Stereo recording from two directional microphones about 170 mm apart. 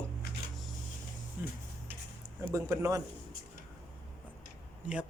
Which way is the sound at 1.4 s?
15° right (ahead or behind).